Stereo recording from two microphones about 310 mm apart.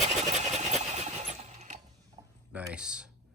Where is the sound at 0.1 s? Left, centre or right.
Right.